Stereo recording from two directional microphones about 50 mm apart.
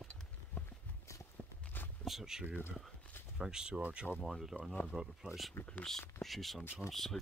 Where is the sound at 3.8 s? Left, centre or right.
Right.